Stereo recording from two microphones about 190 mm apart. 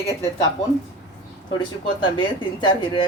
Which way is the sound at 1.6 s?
25° left (ahead or behind).